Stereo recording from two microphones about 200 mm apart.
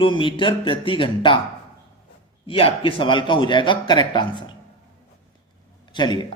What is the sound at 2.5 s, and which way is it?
Speech, 25° left (ahead or behind).